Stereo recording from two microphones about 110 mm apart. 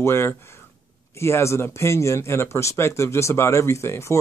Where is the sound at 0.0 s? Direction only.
25° left (ahead or behind).